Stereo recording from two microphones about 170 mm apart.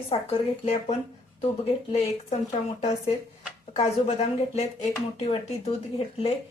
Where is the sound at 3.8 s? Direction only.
40° left (ahead or behind).